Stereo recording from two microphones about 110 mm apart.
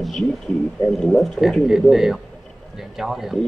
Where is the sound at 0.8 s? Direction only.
Centre (ahead or behind).